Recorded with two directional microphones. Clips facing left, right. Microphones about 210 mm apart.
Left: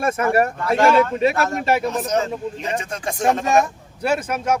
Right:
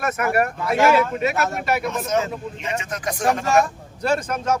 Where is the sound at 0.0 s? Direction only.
30° left (ahead or behind).